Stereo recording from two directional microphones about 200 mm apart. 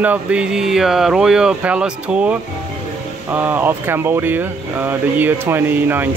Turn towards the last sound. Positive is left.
turn(degrees=-10)  # may be behind; listen again after turning